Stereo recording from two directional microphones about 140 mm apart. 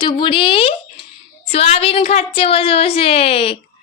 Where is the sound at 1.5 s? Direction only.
45° left (ahead or behind).